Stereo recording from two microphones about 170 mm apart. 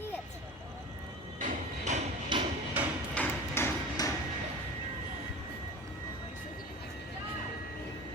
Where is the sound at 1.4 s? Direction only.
45° right (ahead or behind).